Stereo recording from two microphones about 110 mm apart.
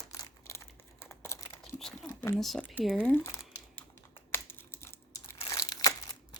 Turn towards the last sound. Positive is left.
turn(degrees=35)  # may be behind; listen again after turning